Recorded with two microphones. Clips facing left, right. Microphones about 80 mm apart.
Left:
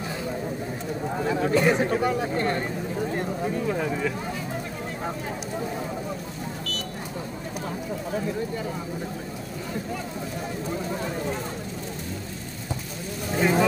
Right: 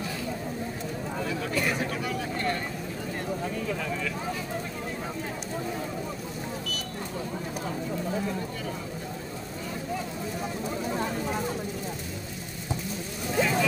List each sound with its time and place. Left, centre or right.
1.1 s speech: left
13.4 s vehicle: left